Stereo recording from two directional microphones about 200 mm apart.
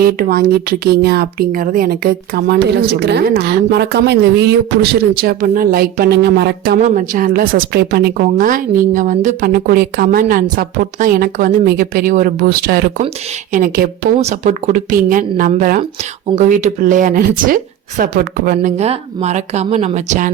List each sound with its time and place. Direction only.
0.0 s speech: 45° right (ahead or behind)
6.7 s speech: 40° right (ahead or behind)